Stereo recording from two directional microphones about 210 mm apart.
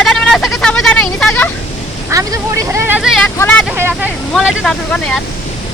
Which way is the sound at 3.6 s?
10° right (ahead or behind).